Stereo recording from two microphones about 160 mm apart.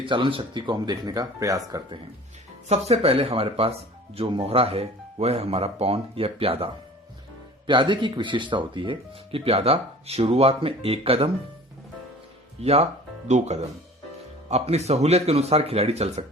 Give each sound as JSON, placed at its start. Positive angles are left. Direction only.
{"t": 0.0, "sound": "speech", "side_deg": -30}
{"t": 2.6, "sound": "speech", "side_deg": -40}
{"t": 7.7, "sound": "speech", "side_deg": -30}
{"t": 12.5, "sound": "speech", "side_deg": -40}